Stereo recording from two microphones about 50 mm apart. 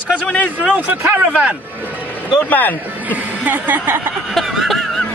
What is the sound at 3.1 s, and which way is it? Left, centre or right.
Speech, right.